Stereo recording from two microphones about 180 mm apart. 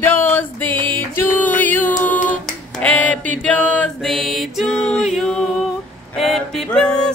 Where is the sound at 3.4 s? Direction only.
5° left (ahead or behind).